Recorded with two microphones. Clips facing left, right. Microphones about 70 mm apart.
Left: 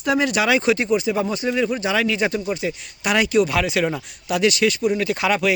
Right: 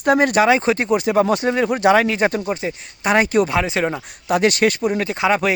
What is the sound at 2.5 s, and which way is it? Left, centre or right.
Speech, right.